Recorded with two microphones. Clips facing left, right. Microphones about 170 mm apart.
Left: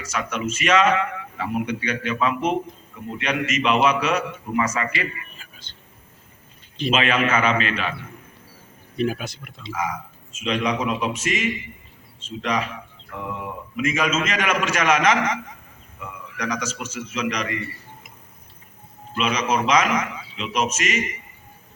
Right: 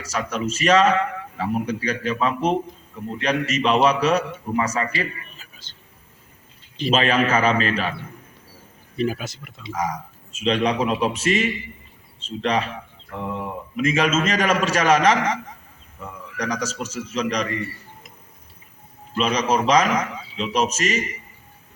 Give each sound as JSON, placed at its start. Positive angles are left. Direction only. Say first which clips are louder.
{"t": 0.0, "sound": "a man's voice", "louder": "right 1 dB", "side_deg": -35}
{"t": 6.9, "sound": "a man's voice", "louder": "right 2 dB", "side_deg": -35}
{"t": 9.0, "sound": "speech", "louder": "even", "side_deg": 0}
{"t": 9.7, "sound": "a man's voice", "louder": "right 2 dB", "side_deg": -35}
{"t": 19.1, "sound": "a man's voice", "louder": "right 2 dB", "side_deg": -35}